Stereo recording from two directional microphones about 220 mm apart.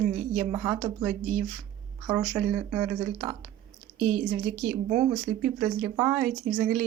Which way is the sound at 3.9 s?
35° right (ahead or behind).